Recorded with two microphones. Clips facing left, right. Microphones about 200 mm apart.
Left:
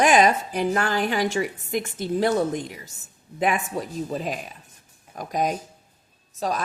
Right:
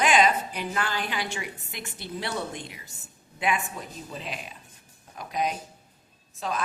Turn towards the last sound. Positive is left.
turn(degrees=40)  # may be behind; listen again after turning